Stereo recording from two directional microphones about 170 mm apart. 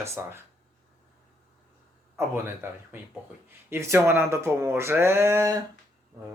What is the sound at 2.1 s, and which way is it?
A man's voice, 15° right (ahead or behind).